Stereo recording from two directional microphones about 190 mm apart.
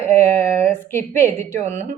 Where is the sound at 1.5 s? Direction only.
40° right (ahead or behind).